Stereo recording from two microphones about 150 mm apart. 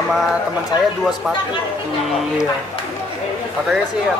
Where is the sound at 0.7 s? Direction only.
30° left (ahead or behind).